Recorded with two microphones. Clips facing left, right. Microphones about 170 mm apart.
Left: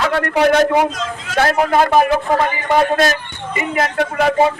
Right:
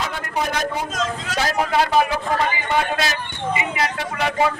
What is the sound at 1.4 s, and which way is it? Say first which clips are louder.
A man's voice: left 6 dB; 55° left (ahead or behind).